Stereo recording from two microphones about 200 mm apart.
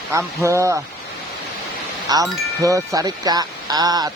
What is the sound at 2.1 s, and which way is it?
Speech, 15° right (ahead or behind).